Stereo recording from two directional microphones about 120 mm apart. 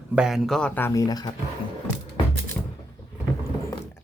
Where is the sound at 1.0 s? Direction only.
35° left (ahead or behind).